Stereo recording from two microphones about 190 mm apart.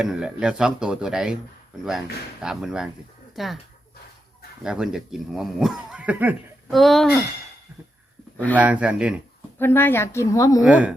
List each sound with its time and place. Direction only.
0.0 s speech: 5° right (ahead or behind)
2.4 s speech: centre (ahead or behind)
4.6 s speech: 5° right (ahead or behind)
8.5 s speech: 5° right (ahead or behind)
9.6 s a woman's voice: 10° left (ahead or behind)
10.6 s speech: 5° right (ahead or behind)